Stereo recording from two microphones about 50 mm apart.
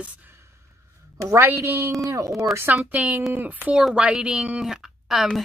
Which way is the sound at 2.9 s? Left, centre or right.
Right.